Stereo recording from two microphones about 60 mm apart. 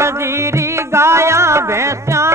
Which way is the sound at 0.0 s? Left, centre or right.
Right.